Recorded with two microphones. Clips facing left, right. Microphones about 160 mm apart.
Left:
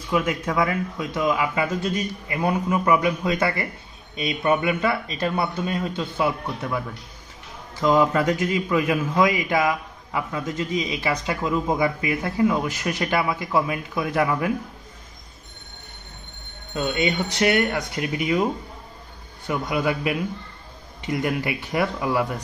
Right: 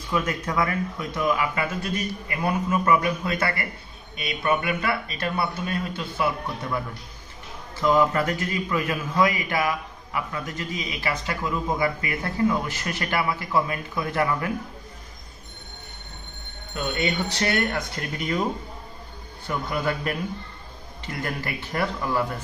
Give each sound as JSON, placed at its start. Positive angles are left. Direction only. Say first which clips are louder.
{"t": 0.1, "sound": "a man's voice", "louder": "left 3 dB", "side_deg": 10}
{"t": 7.8, "sound": "a man's voice", "louder": "left 2 dB", "side_deg": 20}
{"t": 16.7, "sound": "a man's voice", "louder": "left 3 dB", "side_deg": 20}